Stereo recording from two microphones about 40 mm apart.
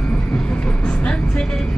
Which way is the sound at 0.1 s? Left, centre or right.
Left.